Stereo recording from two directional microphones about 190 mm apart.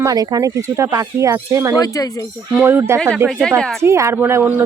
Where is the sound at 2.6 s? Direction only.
10° right (ahead or behind).